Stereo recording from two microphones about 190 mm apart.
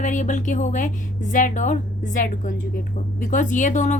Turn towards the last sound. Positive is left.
turn(degrees=40)  # may be behind; listen again after turning